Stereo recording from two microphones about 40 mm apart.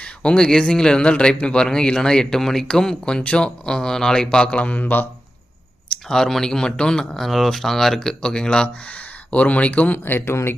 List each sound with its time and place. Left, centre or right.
0.0 s speech: left
4.4 s speech: left
6.1 s speech: centre
7.2 s speech: centre; by 8.7 s left
9.3 s speech: left
10.0 s speech: left